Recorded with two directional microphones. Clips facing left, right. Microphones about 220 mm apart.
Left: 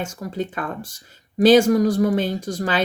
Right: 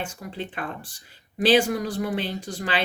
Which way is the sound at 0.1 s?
45° left (ahead or behind).